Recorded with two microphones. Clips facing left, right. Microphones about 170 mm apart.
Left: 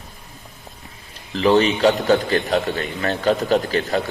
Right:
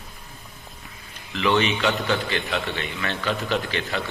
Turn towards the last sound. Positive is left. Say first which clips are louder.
# left 7 dB
turn(degrees=40)  # may be behind; listen again after turning